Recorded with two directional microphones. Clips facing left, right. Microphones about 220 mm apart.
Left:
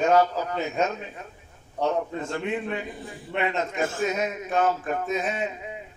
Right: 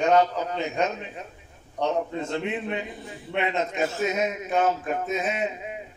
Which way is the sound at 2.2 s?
20° right (ahead or behind).